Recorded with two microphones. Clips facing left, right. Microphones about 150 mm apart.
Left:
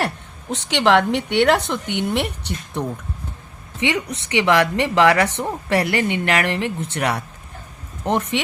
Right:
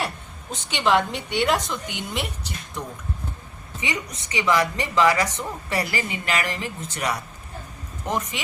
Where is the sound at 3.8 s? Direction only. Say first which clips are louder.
Left 8 dB; 70° left (ahead or behind).